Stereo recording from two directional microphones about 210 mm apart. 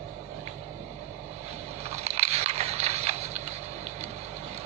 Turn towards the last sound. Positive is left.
turn(degrees=-30)  # may be behind; listen again after turning